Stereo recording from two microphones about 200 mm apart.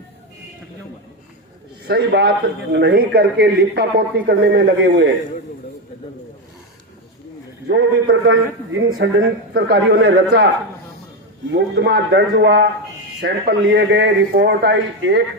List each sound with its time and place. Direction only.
1.9 s a man's voice: 55° right (ahead or behind)
7.7 s a man's voice: 65° right (ahead or behind)
11.5 s a man's voice: 55° right (ahead or behind)